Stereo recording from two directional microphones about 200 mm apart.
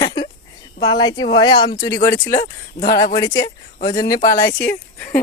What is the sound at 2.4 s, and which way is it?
Speech, 45° left (ahead or behind).